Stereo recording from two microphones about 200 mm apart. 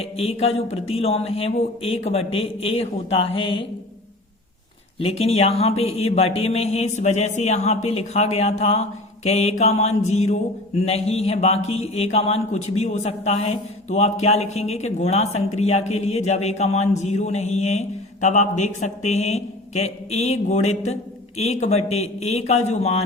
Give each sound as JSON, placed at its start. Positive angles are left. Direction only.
{"t": 0.0, "sound": "speech", "side_deg": 30}
{"t": 4.9, "sound": "speech", "side_deg": 30}